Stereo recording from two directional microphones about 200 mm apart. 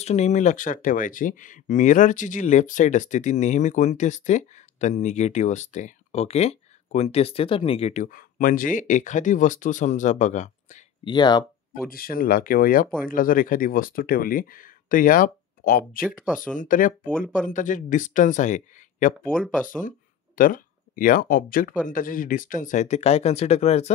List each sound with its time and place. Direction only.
0.0 s speech: 35° left (ahead or behind)
11.1 s speech: 20° left (ahead or behind)
11.9 s speech: 45° left (ahead or behind)
19.2 s speech: 5° left (ahead or behind)
20.3 s speech: 45° left (ahead or behind)